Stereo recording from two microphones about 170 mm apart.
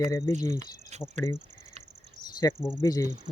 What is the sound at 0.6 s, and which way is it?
Cricket, 45° right (ahead or behind).